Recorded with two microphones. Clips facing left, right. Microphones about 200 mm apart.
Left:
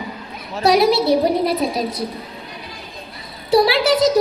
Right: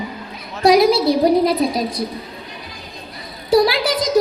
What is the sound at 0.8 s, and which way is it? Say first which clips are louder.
Speech: right 1 dB; 45° right (ahead or behind).